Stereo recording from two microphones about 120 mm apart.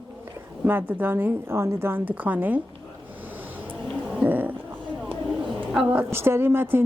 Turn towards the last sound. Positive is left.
turn(degrees=-20)  # may be behind; listen again after turning